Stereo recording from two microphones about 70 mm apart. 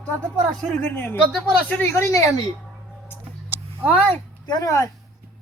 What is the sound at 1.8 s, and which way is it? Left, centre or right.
Speech, left.